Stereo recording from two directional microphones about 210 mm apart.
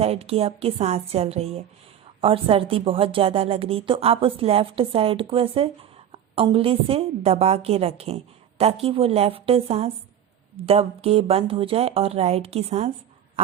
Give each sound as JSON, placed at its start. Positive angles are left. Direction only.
{"t": 0.0, "sound": "speech", "side_deg": -30}